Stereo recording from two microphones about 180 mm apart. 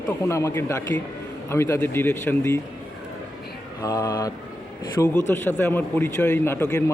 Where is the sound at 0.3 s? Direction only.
15° left (ahead or behind).